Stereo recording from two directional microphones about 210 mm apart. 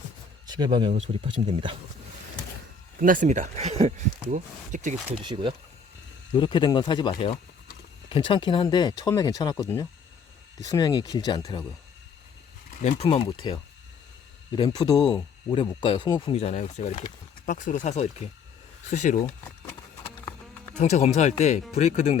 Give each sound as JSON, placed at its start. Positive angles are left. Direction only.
{"t": 0.4, "sound": "speech", "side_deg": -20}
{"t": 3.0, "sound": "speech", "side_deg": -40}
{"t": 5.2, "sound": "speech", "side_deg": -25}
{"t": 6.3, "sound": "speech", "side_deg": 25}
{"t": 12.8, "sound": "speech", "side_deg": 30}
{"t": 14.5, "sound": "speech", "side_deg": 20}
{"t": 20.7, "sound": "speech", "side_deg": 30}